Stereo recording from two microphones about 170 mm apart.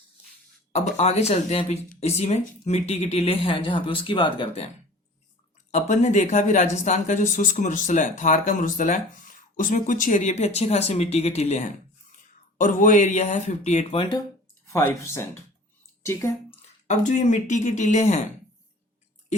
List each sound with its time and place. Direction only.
0.7 s speech: 40° left (ahead or behind)
5.7 s speech: 45° left (ahead or behind)
14.7 s speech: 15° left (ahead or behind)
16.5 s speech: 40° left (ahead or behind)